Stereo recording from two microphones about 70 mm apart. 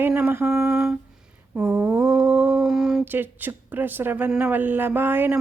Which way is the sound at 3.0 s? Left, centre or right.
Right.